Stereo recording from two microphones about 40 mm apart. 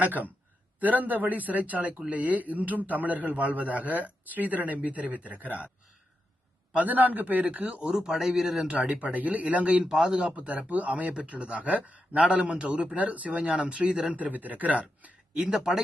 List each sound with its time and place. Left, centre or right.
0.0 s speech: right
6.7 s speech: right
7.8 s a man's voice: right
8.7 s speech: right
10.2 s a man's voice: right
15.4 s a man's voice: centre